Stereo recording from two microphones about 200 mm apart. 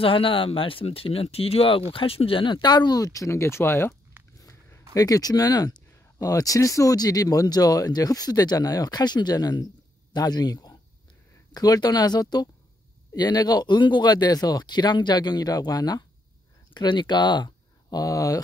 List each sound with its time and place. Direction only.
0.0 s speech: 25° left (ahead or behind)
4.4 s a sound: 15° left (ahead or behind)
4.9 s speech: 20° left (ahead or behind)